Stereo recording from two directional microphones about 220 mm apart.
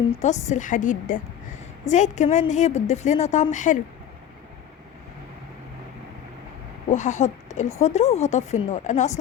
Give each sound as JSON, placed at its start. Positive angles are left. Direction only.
{"t": 0.2, "sound": "speech", "side_deg": 30}
{"t": 6.9, "sound": "speech", "side_deg": 35}